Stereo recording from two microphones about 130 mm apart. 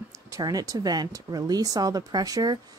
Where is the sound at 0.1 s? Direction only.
25° right (ahead or behind).